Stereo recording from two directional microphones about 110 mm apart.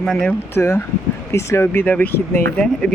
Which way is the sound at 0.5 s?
25° left (ahead or behind).